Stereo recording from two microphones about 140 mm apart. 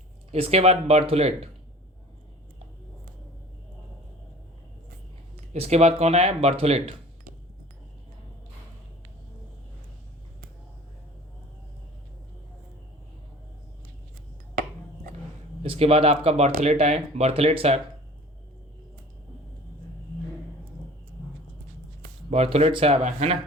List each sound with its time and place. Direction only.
0.3 s speech: 45° right (ahead or behind)
5.5 s speech: 50° right (ahead or behind)
15.6 s speech: 45° right (ahead or behind)
22.3 s speech: 45° right (ahead or behind)